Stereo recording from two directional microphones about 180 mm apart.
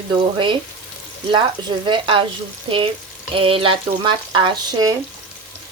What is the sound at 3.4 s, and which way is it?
Speech, 30° right (ahead or behind).